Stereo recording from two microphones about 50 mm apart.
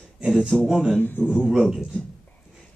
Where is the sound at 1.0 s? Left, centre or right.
Left.